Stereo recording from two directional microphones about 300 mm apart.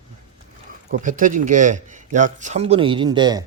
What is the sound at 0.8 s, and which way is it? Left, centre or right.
Speech, right.